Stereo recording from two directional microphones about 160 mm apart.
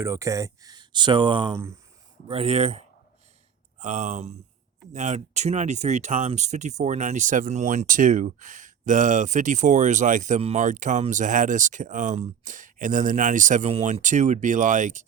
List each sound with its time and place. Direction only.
0.0 s speech: 20° right (ahead or behind); by 15.0 s 50° right (ahead or behind)